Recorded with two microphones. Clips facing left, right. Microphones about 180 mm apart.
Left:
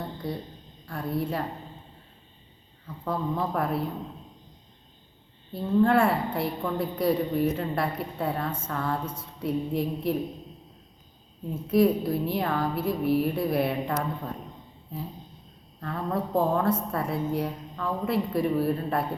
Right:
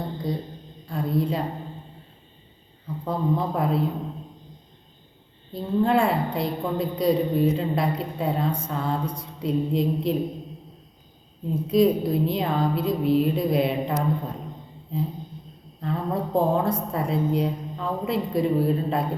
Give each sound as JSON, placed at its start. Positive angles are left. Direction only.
{"t": 0.0, "sound": "a sound", "side_deg": -15}
{"t": 0.9, "sound": "a woman's voice", "side_deg": -20}
{"t": 3.0, "sound": "a woman's voice", "side_deg": -20}
{"t": 5.5, "sound": "a woman's voice", "side_deg": -20}
{"t": 11.4, "sound": "a woman's voice", "side_deg": -20}
{"t": 15.8, "sound": "a woman's voice", "side_deg": -20}